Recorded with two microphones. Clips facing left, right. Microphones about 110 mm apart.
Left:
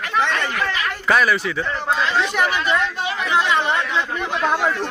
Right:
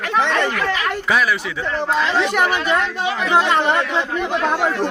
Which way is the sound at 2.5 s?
50° right (ahead or behind).